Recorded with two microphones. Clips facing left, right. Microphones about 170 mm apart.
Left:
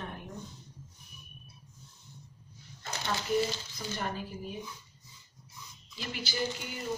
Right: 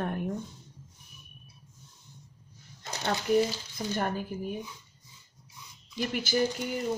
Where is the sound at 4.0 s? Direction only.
55° right (ahead or behind).